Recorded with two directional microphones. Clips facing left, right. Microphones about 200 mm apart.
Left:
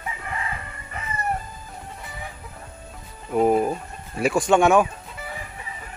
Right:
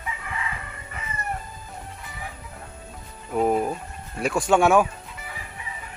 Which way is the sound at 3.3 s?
5° left (ahead or behind).